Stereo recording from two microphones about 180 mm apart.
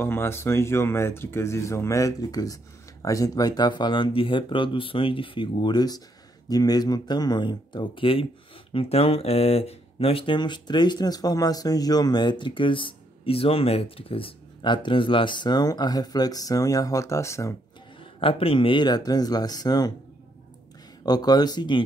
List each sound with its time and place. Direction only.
0.0 s speech: 15° left (ahead or behind)
18.2 s speech: 30° left (ahead or behind)
21.0 s speech: 20° left (ahead or behind)